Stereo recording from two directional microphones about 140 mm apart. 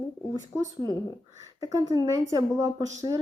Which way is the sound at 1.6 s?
25° right (ahead or behind).